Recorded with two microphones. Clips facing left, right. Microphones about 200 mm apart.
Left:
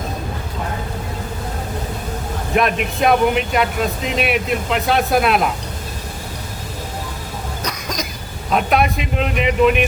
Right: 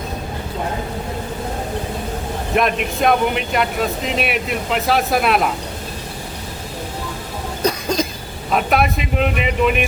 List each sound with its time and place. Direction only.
2.6 s speech: centre (ahead or behind)
7.6 s cough: 30° right (ahead or behind)
8.4 s speech: centre (ahead or behind)